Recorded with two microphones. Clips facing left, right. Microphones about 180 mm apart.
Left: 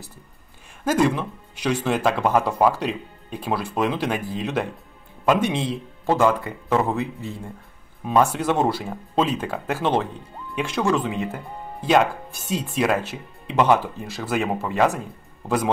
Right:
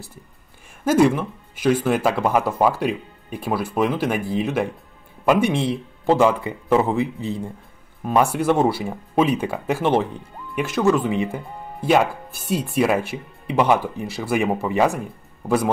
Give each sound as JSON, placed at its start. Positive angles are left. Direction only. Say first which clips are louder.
{"t": 0.8, "sound": "a man's voice", "louder": "right 4 dB", "side_deg": -10}